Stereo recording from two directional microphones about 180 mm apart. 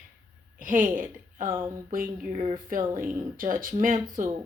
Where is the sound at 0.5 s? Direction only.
45° right (ahead or behind).